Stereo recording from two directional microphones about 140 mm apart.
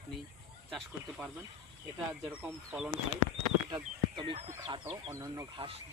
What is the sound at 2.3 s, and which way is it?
Speech, 10° right (ahead or behind).